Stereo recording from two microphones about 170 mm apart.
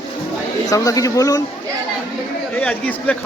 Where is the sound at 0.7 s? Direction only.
20° left (ahead or behind).